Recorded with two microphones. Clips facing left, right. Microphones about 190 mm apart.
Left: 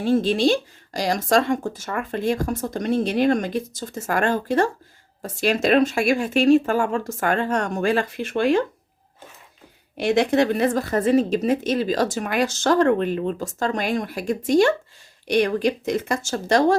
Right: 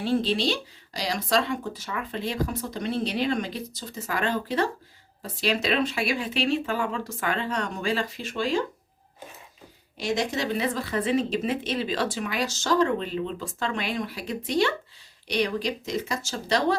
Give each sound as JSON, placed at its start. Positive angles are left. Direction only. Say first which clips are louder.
{"t": 0.0, "sound": "speech", "louder": "left 6 dB", "side_deg": 45}
{"t": 10.0, "sound": "speech", "louder": "left 9 dB", "side_deg": 60}